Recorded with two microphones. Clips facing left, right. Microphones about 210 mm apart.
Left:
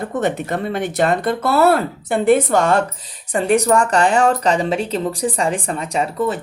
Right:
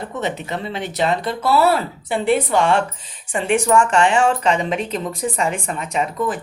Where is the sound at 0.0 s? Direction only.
50° left (ahead or behind).